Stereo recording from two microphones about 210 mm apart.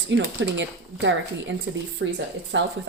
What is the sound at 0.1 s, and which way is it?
Speech, 60° right (ahead or behind).